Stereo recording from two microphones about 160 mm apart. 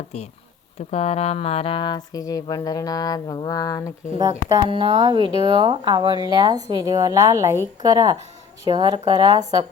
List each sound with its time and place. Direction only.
0.9 s speech: 40° left (ahead or behind); by 3.9 s 20° left (ahead or behind)
4.5 s speech: 35° right (ahead or behind)